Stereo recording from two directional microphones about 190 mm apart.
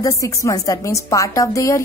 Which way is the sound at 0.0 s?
15° left (ahead or behind).